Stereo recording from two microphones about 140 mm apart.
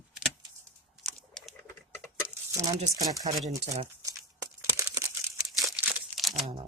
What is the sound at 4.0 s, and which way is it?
Crumpling, 25° right (ahead or behind).